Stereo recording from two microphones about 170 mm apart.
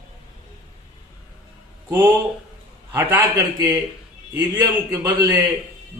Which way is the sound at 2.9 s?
10° right (ahead or behind).